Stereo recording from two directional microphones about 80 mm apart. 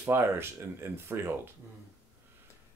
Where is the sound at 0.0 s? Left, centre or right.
Right.